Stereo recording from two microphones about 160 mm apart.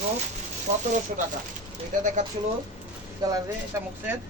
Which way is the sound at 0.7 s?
45° right (ahead or behind).